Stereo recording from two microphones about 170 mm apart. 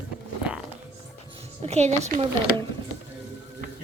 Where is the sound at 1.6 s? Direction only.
40° right (ahead or behind).